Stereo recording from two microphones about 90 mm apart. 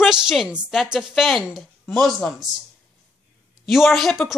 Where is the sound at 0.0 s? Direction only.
5° right (ahead or behind).